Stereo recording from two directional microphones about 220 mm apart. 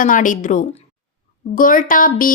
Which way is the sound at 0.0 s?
35° left (ahead or behind).